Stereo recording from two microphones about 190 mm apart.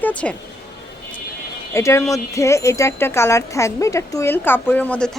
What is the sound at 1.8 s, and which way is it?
A woman's voice, 15° left (ahead or behind).